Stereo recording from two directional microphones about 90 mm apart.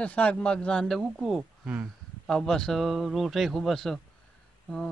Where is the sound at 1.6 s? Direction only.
15° right (ahead or behind).